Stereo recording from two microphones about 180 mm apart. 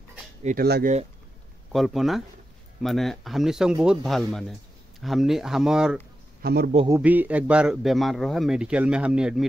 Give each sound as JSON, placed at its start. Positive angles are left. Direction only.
{"t": 0.4, "sound": "speech", "side_deg": -45}
{"t": 1.7, "sound": "a man's voice", "side_deg": 0}
{"t": 6.4, "sound": "a man's voice", "side_deg": -60}
{"t": 7.0, "sound": "a man's voice", "side_deg": -10}